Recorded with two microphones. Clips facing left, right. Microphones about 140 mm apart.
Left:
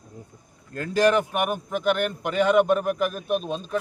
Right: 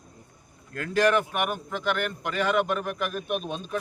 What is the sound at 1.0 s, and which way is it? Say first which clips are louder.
A man's voice: left 4 dB; 15° left (ahead or behind).